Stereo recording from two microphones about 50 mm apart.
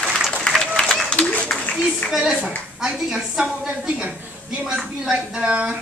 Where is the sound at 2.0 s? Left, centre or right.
Centre.